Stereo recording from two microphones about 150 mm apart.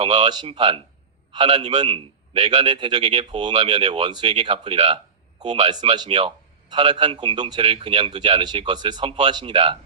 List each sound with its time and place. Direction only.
0.0 s a man's voice: 45° right (ahead or behind)
0.3 s a man's voice: 30° right (ahead or behind)
2.7 s a man's voice: 30° right (ahead or behind)